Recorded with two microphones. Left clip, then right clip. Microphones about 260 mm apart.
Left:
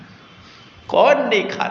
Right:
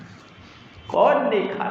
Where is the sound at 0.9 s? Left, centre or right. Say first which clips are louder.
Left 4 dB; left.